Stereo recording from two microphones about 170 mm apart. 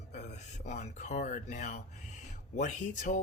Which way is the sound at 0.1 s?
45° left (ahead or behind).